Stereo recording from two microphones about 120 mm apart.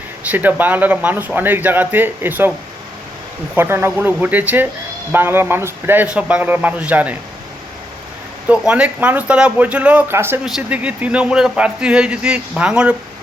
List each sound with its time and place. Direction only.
0.3 s a man's voice: 15° right (ahead or behind)
3.5 s a man's voice: 20° right (ahead or behind)
8.4 s a man's voice: 10° right (ahead or behind)
10.4 s a man's voice: 10° right (ahead or behind)